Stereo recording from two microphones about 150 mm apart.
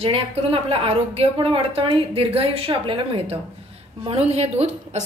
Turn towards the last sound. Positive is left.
turn(degrees=-45)  # may be behind; listen again after turning